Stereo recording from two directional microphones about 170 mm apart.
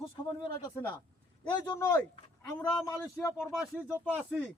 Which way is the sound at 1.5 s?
25° left (ahead or behind).